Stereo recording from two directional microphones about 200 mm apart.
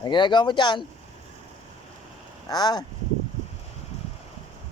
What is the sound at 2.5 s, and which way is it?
Speech, 20° left (ahead or behind).